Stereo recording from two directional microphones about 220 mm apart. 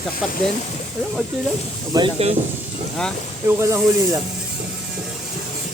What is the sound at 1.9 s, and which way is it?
Speech, 25° right (ahead or behind).